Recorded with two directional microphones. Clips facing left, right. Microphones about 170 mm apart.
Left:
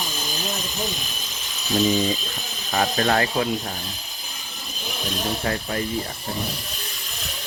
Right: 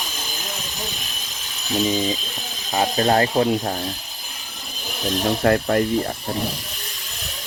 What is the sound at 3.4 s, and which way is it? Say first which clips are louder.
Rub: right 6 dB; 45° right (ahead or behind).